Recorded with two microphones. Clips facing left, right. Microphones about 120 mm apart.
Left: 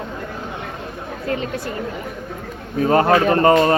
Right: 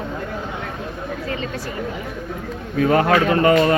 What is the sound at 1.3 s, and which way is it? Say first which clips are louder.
Speech: left 2 dB; 55° left (ahead or behind).